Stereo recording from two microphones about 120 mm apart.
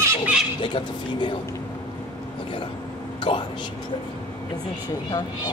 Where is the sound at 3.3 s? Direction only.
50° left (ahead or behind).